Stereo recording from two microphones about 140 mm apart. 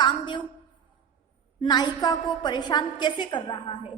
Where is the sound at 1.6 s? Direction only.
30° left (ahead or behind).